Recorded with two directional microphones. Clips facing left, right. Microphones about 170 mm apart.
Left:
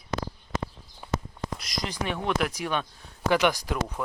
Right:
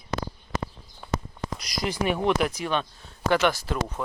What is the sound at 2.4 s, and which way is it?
Speech, 10° left (ahead or behind).